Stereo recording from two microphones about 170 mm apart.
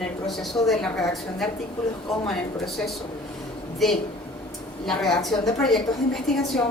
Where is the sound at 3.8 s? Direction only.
Centre (ahead or behind).